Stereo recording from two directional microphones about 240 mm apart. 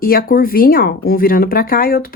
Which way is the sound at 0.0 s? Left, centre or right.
Left.